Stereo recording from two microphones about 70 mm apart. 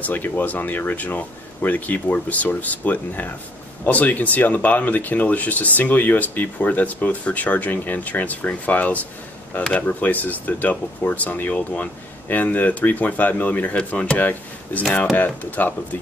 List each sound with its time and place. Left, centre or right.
0.0 s speech: left